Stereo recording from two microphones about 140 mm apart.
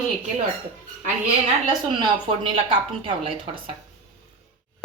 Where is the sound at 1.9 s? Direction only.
35° right (ahead or behind).